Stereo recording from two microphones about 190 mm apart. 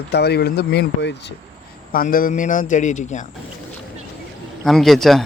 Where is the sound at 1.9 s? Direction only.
50° left (ahead or behind).